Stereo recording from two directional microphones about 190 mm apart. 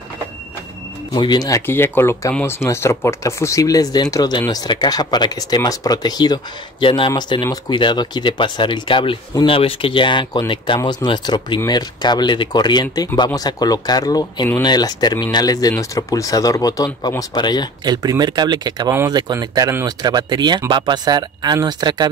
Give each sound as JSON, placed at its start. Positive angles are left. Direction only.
{"t": 1.1, "sound": "speech", "side_deg": 20}
{"t": 17.8, "sound": "speech", "side_deg": -20}